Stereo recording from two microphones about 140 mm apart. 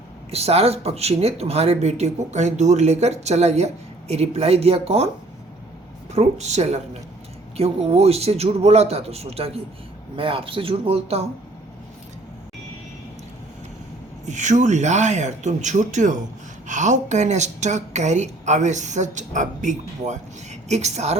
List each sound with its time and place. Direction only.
0.3 s speech: 45° right (ahead or behind)
6.1 s speech: 50° right (ahead or behind)
14.3 s a woman's voice: 60° right (ahead or behind)